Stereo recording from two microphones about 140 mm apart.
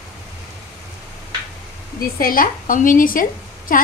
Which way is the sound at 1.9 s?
90° left.